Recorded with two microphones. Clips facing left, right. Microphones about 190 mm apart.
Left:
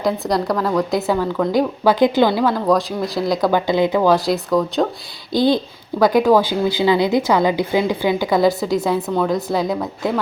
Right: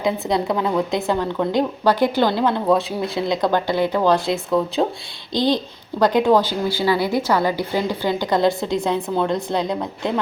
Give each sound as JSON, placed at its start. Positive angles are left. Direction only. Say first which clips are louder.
{"t": 0.0, "sound": "a woman's voice", "louder": "left 1 dB", "side_deg": 0}
{"t": 3.7, "sound": "a woman's voice", "louder": "left 3 dB", "side_deg": 15}
{"t": 6.0, "sound": "a woman's voice", "louder": "left 2 dB", "side_deg": 10}